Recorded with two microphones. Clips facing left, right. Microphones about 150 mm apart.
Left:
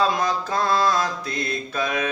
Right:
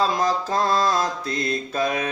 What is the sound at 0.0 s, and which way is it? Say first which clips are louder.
Mantra: even; 35° right (ahead or behind).